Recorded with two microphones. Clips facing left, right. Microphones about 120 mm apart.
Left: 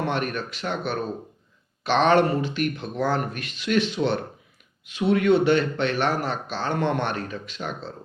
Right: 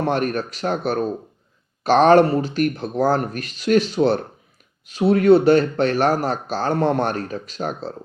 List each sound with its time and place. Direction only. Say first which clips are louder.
0.0 s speech: right 5 dB; 40° right (ahead or behind)